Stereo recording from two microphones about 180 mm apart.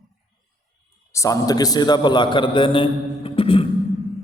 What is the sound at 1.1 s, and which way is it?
A man's voice, 20° left (ahead or behind).